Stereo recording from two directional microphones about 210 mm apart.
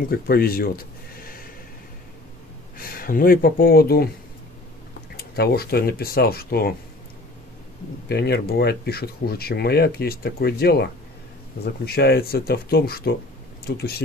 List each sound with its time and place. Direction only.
0.1 s speech: 45° left (ahead or behind)
2.8 s speech: 45° left (ahead or behind)
5.1 s speech: 50° left (ahead or behind)
8.1 s speech: 50° left (ahead or behind)